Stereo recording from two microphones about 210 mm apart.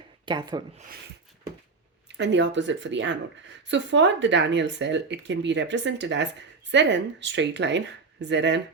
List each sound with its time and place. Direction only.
0.3 s speech: 20° right (ahead or behind)
2.1 s speech: 55° right (ahead or behind)